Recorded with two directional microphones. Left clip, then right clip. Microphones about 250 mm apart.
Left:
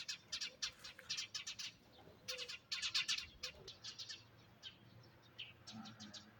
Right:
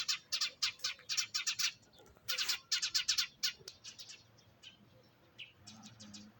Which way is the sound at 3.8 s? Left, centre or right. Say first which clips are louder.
Left 3 dB; right.